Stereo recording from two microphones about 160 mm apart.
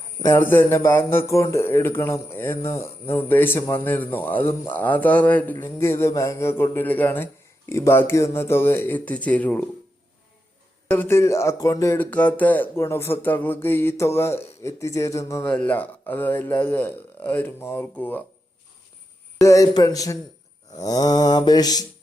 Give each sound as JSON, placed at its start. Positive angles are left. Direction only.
{"t": 0.2, "sound": "speech", "side_deg": 15}
{"t": 10.8, "sound": "speech", "side_deg": 10}
{"t": 19.5, "sound": "mantra", "side_deg": 20}